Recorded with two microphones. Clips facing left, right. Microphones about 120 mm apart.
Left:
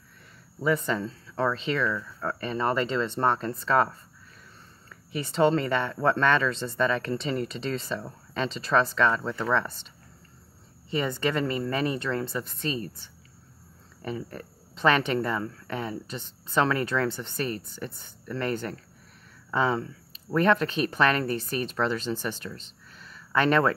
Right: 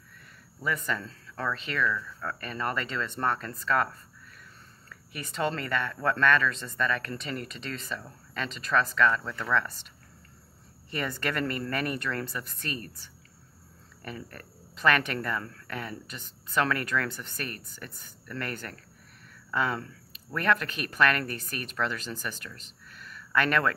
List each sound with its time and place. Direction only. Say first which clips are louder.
0.6 s speech: left 6 dB; 30° left (ahead or behind)
10.9 s speech: left 5 dB; 20° left (ahead or behind)